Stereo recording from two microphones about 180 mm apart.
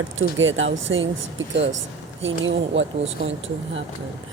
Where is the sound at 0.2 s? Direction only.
90° right.